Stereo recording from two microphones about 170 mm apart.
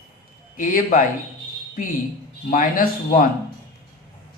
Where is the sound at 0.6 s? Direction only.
50° left (ahead or behind).